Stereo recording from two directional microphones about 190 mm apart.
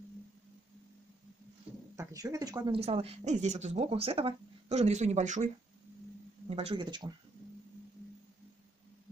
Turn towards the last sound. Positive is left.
turn(degrees=-20)  # may be behind; listen again after turning